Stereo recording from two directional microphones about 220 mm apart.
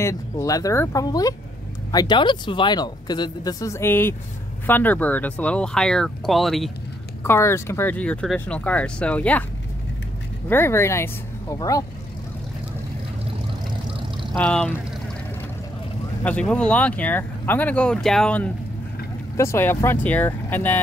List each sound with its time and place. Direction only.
0.0 s speech: 15° left (ahead or behind)
7.2 s speech: 10° left (ahead or behind)
10.5 s speech: 10° left (ahead or behind)
14.3 s speech: 5° left (ahead or behind)
16.3 s speech: 5° left (ahead or behind)